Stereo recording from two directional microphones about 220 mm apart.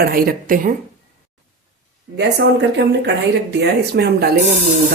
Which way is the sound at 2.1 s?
50° right (ahead or behind).